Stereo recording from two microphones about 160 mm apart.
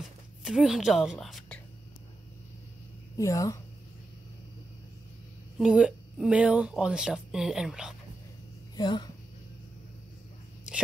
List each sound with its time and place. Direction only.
0.4 s a woman's voice: centre (ahead or behind)
3.2 s speech: 20° left (ahead or behind)
5.6 s speech: 5° right (ahead or behind)
8.7 s speech: 25° left (ahead or behind)